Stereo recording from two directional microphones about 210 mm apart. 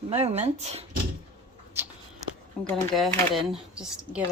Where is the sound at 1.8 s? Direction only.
10° right (ahead or behind).